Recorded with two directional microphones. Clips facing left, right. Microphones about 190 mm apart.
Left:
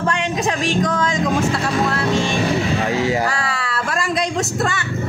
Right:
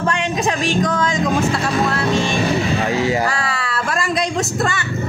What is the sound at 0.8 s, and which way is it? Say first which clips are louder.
Speech: right 1 dB; 5° right (ahead or behind).